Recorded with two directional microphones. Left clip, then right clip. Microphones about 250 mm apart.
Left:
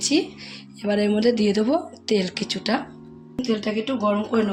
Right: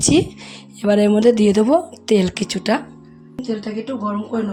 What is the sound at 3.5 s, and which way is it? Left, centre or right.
Speech, centre.